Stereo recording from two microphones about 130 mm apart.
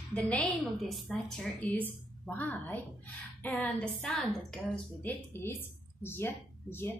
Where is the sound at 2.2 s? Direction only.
15° left (ahead or behind).